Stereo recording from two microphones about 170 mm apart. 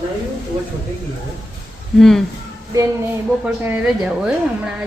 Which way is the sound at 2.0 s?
Centre (ahead or behind).